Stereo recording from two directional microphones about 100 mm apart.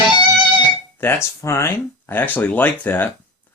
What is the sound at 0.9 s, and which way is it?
Speech, 25° left (ahead or behind).